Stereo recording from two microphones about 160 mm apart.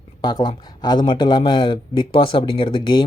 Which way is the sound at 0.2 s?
30° left (ahead or behind).